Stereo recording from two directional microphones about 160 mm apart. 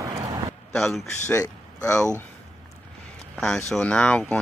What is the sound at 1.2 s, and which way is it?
Speech, 20° left (ahead or behind).